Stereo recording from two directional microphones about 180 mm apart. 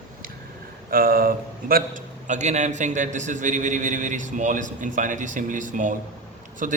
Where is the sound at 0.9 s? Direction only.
55° right (ahead or behind).